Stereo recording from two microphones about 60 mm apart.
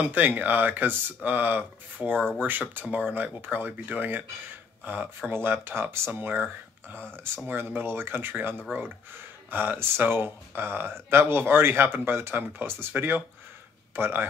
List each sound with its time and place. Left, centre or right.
0.0 s speech: right
2.1 s speech: centre
2.4 s speech: right
5.3 s speech: right
7.0 s speech: centre
7.4 s speech: right